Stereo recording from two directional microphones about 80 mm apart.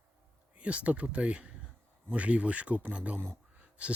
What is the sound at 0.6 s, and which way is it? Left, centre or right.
Speech, centre.